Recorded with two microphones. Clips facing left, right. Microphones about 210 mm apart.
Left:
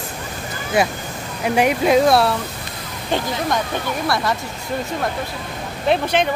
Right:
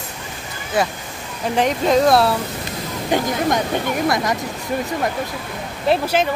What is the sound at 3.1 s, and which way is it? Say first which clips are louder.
Speech: right 2 dB; 20° right (ahead or behind).